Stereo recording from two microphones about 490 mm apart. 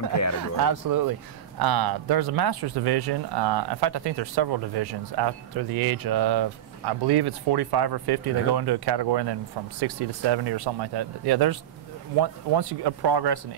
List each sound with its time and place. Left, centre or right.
0.4 s speech: right